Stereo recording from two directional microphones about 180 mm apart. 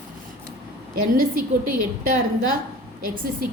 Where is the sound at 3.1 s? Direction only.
55° right (ahead or behind).